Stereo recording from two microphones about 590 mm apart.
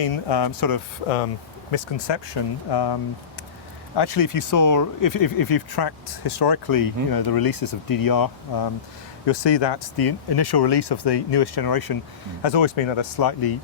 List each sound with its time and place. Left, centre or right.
0.1 s speech: left
1.7 s speech: left
12.4 s speech: left